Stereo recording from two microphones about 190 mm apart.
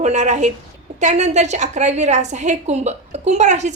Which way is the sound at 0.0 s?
40° right (ahead or behind).